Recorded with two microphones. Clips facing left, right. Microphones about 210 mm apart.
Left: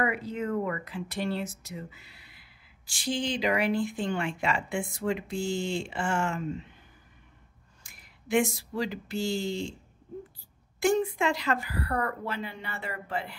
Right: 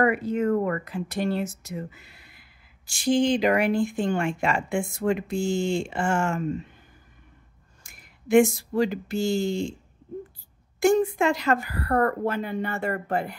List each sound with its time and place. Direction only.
0.0 s speech: 50° right (ahead or behind)
7.8 s speech: 50° right (ahead or behind)
10.8 s speech: 45° right (ahead or behind)